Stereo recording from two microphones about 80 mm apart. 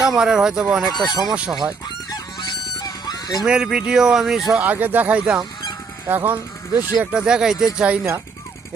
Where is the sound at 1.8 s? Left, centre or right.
Left.